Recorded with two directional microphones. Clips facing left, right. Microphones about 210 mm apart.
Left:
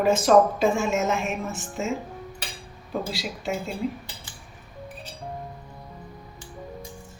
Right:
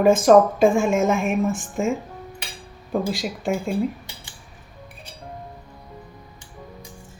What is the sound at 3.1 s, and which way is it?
Speech, 50° right (ahead or behind).